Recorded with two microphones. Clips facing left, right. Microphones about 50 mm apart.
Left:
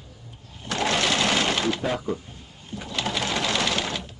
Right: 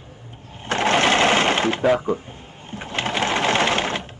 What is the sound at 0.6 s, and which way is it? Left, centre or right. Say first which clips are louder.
Sewing machine: right 6 dB; right.